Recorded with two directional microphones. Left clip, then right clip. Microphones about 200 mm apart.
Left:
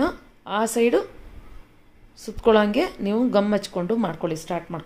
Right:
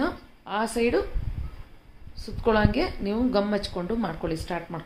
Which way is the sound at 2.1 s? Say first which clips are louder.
Left 5 dB; 40° left (ahead or behind).